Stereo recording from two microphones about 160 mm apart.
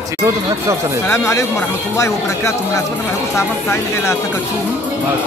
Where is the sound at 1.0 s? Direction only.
15° left (ahead or behind).